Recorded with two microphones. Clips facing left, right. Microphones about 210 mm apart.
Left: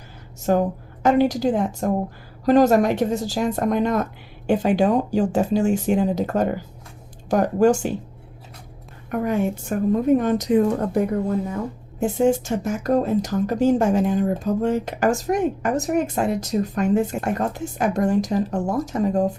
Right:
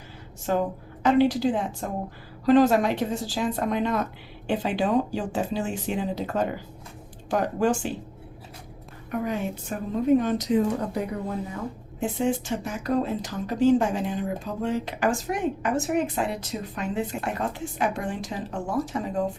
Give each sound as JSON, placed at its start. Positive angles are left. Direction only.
{"t": 0.4, "sound": "a woman's voice", "side_deg": 45}
{"t": 9.0, "sound": "a woman's voice", "side_deg": 50}